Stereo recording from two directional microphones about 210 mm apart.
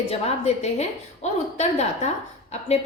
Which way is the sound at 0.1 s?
30° left (ahead or behind).